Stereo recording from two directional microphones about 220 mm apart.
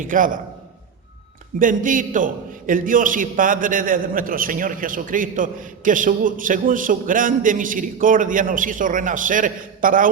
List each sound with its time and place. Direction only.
0.0 s a man's voice: 40° right (ahead or behind)
1.5 s a man's voice: 40° right (ahead or behind)